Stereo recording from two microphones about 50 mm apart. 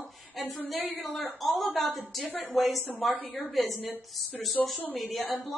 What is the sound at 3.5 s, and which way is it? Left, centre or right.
Speech, centre.